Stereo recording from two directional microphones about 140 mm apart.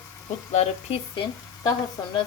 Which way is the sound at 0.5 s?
45° left (ahead or behind).